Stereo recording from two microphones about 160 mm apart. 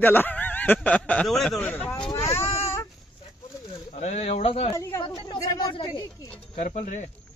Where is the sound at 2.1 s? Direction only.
15° left (ahead or behind).